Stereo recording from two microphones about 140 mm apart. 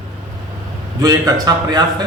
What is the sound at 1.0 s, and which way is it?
Speech, 25° right (ahead or behind).